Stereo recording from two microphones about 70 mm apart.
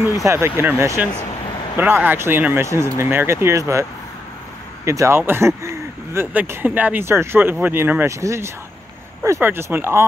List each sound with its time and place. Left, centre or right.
0.1 s speech: right
4.8 s speech: right
5.6 s a sound: right
6.4 s speech: right
9.4 s speech: right